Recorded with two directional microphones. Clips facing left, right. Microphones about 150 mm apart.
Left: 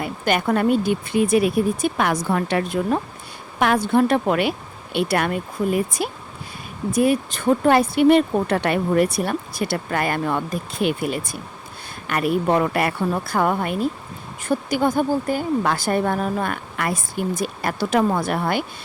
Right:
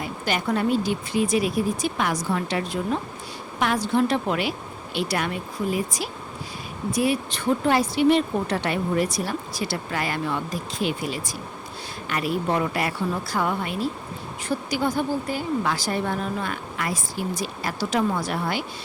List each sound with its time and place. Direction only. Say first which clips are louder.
0.0 s a woman's voice: left 5 dB; 55° left (ahead or behind)